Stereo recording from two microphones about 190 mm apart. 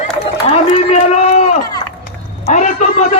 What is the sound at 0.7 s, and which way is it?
A man's voice, 35° left (ahead or behind).